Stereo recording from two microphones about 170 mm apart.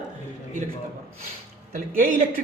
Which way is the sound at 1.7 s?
50° right (ahead or behind).